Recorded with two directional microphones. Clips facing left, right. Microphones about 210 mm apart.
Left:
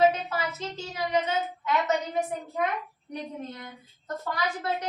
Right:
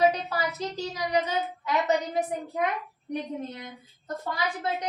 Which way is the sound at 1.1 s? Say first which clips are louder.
Even; 35° right (ahead or behind).